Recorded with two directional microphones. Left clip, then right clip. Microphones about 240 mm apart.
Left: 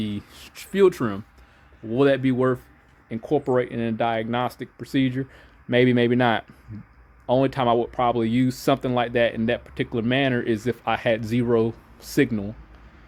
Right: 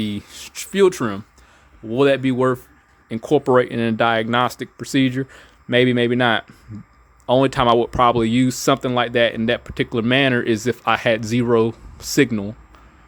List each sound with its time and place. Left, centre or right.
0.0 s speech: centre